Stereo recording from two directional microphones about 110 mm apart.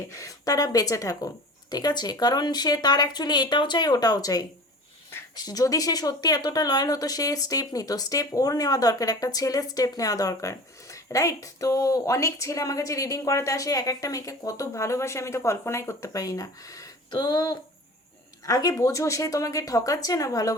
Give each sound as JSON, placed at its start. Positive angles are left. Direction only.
{"t": 0.1, "sound": "speech", "side_deg": 30}